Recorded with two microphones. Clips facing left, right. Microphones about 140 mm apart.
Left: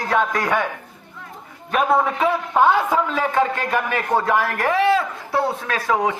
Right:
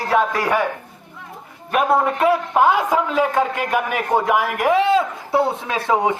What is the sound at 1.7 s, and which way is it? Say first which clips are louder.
A man's voice: right 1 dB; 5° right (ahead or behind).